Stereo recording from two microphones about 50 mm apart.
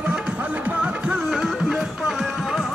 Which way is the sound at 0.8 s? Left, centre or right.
Centre.